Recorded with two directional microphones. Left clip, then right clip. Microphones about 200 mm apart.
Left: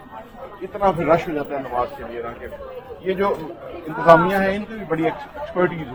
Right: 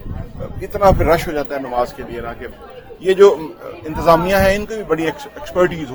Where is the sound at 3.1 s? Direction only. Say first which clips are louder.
Right 11 dB; 55° right (ahead or behind).